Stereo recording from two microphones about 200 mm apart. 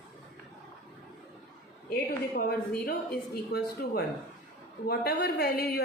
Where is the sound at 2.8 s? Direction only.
50° left (ahead or behind).